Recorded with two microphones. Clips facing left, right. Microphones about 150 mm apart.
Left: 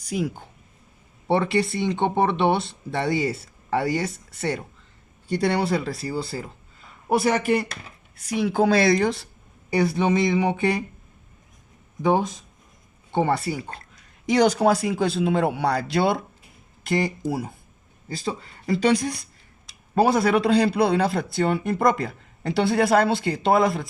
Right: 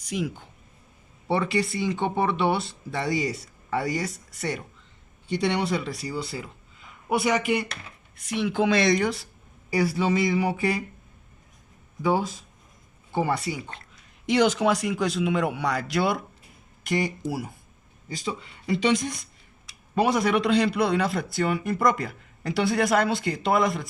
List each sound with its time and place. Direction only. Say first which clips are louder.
0.0 s speech: left 3 dB; 40° left (ahead or behind)
1.3 s a man's voice: left 3 dB; 25° left (ahead or behind)
5.3 s a man's voice: left 3 dB; 35° left (ahead or behind)
12.0 s a man's voice: left 3 dB; 20° left (ahead or behind)
14.3 s speech: left 3 dB; 40° left (ahead or behind)
18.1 s a man's voice: left 3 dB; 35° left (ahead or behind)